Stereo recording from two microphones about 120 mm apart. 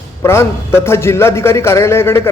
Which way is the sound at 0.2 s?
20° left (ahead or behind).